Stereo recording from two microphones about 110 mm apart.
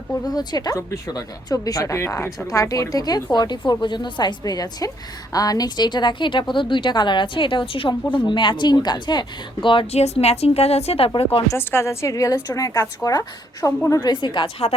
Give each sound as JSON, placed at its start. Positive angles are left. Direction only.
{"t": 0.3, "sound": "a woman's voice", "side_deg": 40}
{"t": 9.8, "sound": "a woman's voice", "side_deg": 70}
{"t": 11.4, "sound": "a woman's voice", "side_deg": 20}